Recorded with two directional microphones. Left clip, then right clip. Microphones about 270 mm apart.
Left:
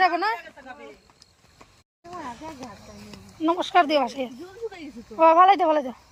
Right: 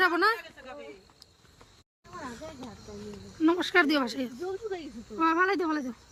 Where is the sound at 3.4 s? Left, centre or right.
Centre.